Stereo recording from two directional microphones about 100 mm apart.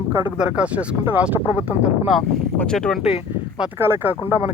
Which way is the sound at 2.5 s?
10° left (ahead or behind).